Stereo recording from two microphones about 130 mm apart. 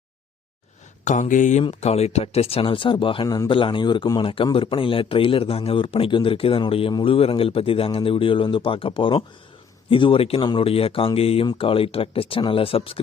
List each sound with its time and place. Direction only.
1.0 s speech: 70° left (ahead or behind)
1.8 s a man's voice: 55° left (ahead or behind); by 3.2 s 40° left (ahead or behind)
3.2 s a man's voice: 30° left (ahead or behind); by 13.0 s 45° left (ahead or behind)